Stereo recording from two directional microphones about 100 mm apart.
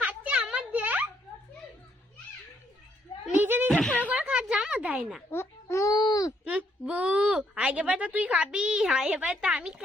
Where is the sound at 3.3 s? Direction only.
20° right (ahead or behind).